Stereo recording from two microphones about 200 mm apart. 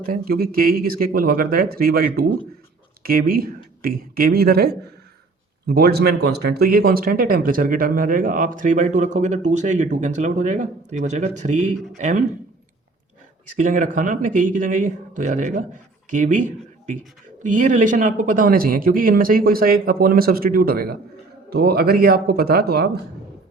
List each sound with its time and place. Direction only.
0.0 s speech: 45° right (ahead or behind)
13.6 s speech: 40° right (ahead or behind)